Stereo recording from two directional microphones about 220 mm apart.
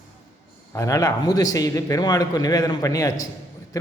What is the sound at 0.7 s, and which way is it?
A man's voice, 15° left (ahead or behind).